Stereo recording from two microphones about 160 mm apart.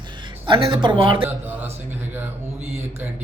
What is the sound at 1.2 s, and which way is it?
Speech, 10° right (ahead or behind).